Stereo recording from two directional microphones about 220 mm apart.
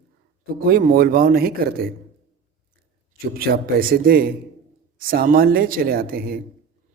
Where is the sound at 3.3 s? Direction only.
45° right (ahead or behind).